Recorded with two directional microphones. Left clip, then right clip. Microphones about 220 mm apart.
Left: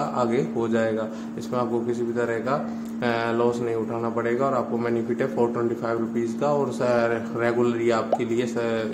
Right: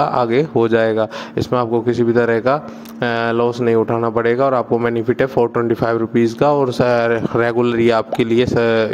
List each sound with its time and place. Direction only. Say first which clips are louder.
0.0 s speech: right 9 dB; 40° right (ahead or behind)